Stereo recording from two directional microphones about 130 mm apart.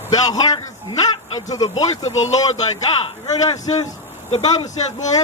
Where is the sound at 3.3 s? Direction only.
30° left (ahead or behind).